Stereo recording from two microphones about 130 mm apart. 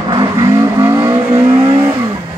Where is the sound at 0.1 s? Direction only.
30° right (ahead or behind).